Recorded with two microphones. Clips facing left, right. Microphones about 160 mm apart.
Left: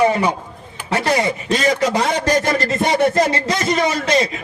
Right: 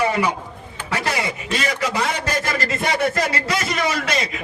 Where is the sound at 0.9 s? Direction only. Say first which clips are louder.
Left 6 dB; 35° left (ahead or behind).